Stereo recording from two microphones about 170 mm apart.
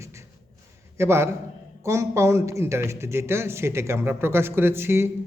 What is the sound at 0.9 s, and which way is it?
Speech, 15° right (ahead or behind).